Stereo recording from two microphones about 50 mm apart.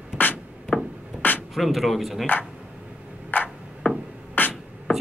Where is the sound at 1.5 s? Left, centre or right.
Centre.